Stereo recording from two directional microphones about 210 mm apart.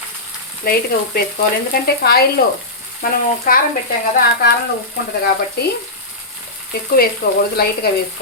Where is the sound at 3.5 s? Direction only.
40° left (ahead or behind).